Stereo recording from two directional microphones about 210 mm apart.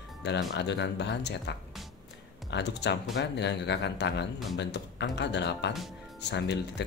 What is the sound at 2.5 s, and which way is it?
A man's voice, 55° left (ahead or behind).